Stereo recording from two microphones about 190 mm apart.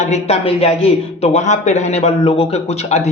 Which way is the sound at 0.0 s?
35° left (ahead or behind).